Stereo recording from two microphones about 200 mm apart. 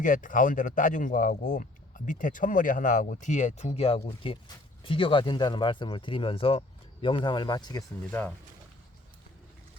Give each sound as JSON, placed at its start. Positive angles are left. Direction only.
{"t": 0.0, "sound": "speech", "side_deg": 40}